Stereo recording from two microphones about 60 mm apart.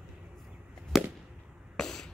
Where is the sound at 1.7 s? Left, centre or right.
Centre.